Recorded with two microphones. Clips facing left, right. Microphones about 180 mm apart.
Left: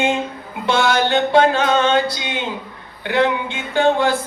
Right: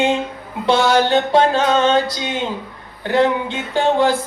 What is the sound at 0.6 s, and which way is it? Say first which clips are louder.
Music: right 3 dB; 35° right (ahead or behind).